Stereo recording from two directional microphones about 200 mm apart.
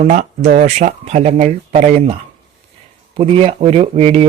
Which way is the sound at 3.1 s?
30° right (ahead or behind).